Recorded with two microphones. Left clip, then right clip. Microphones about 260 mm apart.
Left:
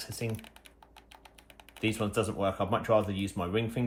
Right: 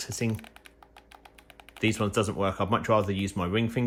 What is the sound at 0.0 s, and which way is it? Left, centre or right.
Speech, right.